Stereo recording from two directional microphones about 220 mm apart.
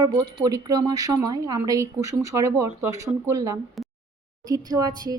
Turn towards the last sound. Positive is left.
turn(degrees=-15)  # may be behind; listen again after turning